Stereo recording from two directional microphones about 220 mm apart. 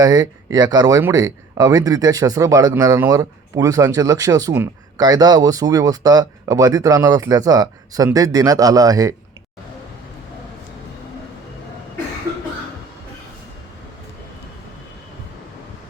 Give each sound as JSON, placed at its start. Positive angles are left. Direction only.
{"t": 0.0, "sound": "speech", "side_deg": -15}